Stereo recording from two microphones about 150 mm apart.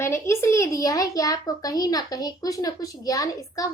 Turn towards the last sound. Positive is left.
turn(degrees=20)  # may be behind; listen again after turning